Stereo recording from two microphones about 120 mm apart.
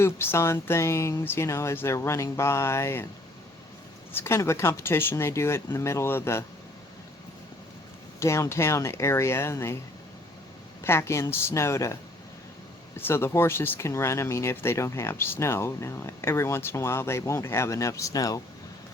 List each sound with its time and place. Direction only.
0.0 s speech: 20° left (ahead or behind)
4.1 s speech: 20° left (ahead or behind)
8.2 s speech: 25° left (ahead or behind)
10.8 s speech: 20° left (ahead or behind)
13.0 s speech: 20° left (ahead or behind)